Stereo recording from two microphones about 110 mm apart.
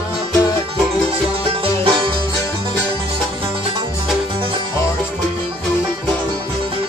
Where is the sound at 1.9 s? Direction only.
45° right (ahead or behind).